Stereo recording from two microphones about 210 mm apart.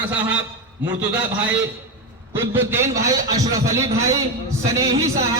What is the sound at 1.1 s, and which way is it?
A man's voice, 10° right (ahead or behind).